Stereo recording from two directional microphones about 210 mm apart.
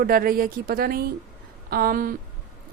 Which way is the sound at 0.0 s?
45° right (ahead or behind).